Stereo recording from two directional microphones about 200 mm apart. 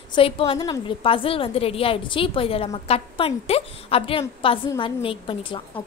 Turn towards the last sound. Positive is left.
turn(degrees=25)  # may be behind; listen again after turning